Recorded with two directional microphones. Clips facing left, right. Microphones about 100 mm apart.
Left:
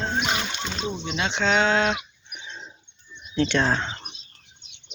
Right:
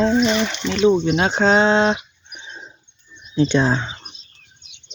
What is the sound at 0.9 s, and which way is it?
Speech, 45° right (ahead or behind).